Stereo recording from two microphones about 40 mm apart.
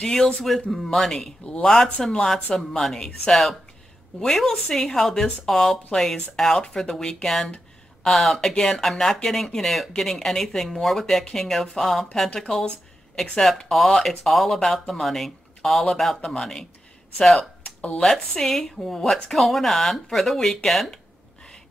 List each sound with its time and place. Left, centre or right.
0.0 s speech: centre
17.6 s a sound: left
18.4 s speech: centre